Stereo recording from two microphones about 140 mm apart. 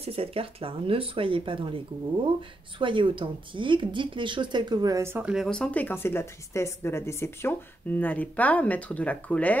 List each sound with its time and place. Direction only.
0.0 s speech: 45° right (ahead or behind)
2.8 s speech: 35° right (ahead or behind); by 5.3 s 15° right (ahead or behind)
5.3 s speech: centre (ahead or behind)